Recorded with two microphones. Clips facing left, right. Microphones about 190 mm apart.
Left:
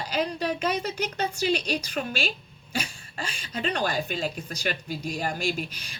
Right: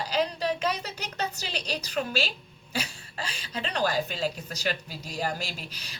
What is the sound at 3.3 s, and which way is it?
A woman's voice, 40° right (ahead or behind).